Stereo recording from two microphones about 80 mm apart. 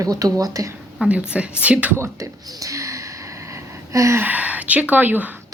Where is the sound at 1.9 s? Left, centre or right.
Right.